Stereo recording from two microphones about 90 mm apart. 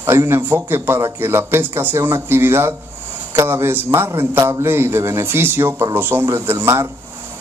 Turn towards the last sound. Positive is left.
turn(degrees=-30)  # may be behind; listen again after turning